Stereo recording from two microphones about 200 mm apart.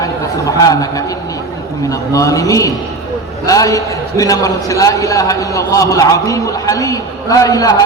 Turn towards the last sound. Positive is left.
turn(degrees=15)  # may be behind; listen again after turning